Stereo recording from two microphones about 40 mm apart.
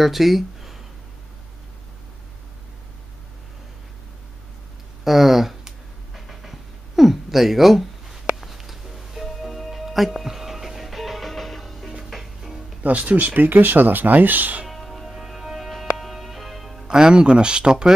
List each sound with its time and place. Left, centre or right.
0.0 s speech: centre
5.0 s a sound: centre
12.1 s music: centre
12.8 s speech: right
14.7 s music: centre
16.8 s speech: right